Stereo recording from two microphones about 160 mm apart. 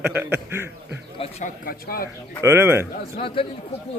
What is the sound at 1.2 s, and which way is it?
Speech, 45° left (ahead or behind).